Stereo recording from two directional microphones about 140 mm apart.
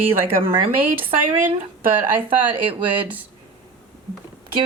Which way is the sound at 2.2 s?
35° right (ahead or behind).